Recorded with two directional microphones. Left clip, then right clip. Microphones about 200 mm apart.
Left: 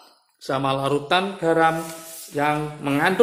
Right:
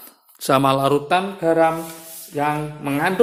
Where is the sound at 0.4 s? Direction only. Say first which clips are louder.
Right 6 dB; 35° right (ahead or behind).